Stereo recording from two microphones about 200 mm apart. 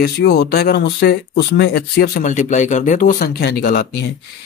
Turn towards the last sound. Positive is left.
turn(degrees=50)  # may be behind; listen again after turning